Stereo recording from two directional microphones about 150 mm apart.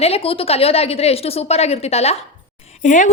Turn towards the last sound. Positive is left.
turn(degrees=55)  # may be behind; listen again after turning